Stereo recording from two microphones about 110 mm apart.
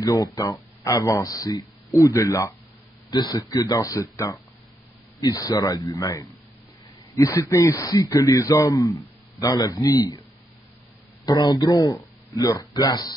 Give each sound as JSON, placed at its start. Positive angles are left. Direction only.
{"t": 0.0, "sound": "a man's voice", "side_deg": 30}
{"t": 7.4, "sound": "a man's voice", "side_deg": 30}
{"t": 11.2, "sound": "a man's voice", "side_deg": 35}